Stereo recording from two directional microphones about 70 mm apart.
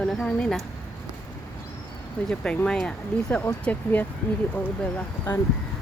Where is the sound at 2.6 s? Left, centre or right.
Centre.